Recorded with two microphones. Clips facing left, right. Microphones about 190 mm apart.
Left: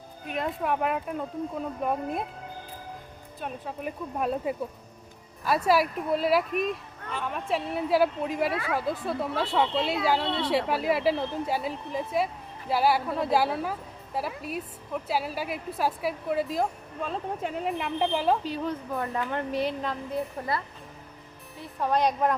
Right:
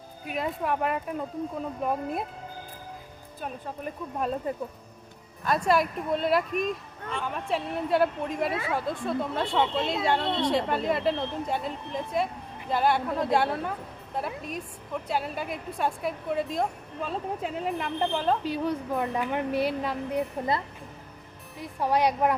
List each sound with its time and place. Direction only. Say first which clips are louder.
0.3 s speech: even; centre (ahead or behind)
3.4 s speech: left 1 dB; 5° left (ahead or behind)
18.4 s speech: right 3 dB; 10° right (ahead or behind)
21.6 s speech: right 1 dB; 10° right (ahead or behind)